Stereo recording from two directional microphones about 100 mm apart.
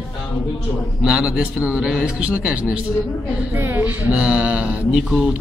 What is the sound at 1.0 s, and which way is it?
A man's voice, 5° right (ahead or behind).